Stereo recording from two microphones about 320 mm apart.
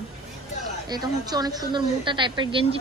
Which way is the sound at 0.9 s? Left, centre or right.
Centre.